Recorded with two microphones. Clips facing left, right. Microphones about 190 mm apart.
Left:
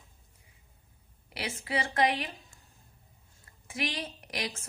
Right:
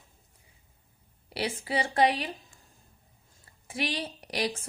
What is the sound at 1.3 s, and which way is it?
Speech, 30° right (ahead or behind).